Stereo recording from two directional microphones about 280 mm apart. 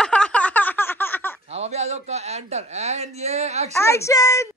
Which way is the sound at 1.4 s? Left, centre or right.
Right.